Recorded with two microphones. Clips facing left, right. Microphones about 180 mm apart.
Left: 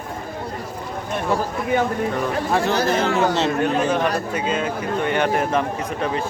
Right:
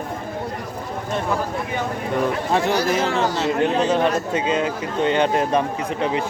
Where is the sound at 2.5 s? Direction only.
20° right (ahead or behind).